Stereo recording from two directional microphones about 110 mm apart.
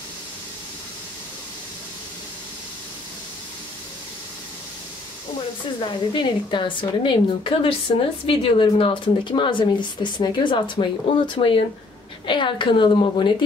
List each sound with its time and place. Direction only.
5.8 s a woman's voice: 45° left (ahead or behind)